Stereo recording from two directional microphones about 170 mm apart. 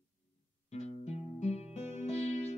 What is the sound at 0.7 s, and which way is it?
Music, 40° left (ahead or behind).